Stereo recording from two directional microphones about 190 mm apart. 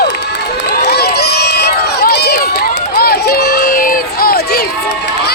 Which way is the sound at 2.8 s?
55° left (ahead or behind).